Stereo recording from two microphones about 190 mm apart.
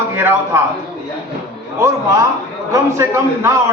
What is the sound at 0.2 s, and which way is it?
Speech, 10° right (ahead or behind).